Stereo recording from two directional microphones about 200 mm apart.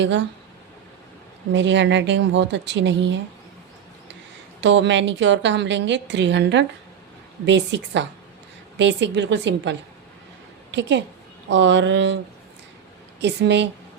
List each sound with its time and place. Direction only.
0.0 s a woman's voice: 65° right (ahead or behind)
1.5 s a woman's voice: 65° right (ahead or behind)
4.6 s a woman's voice: 60° right (ahead or behind)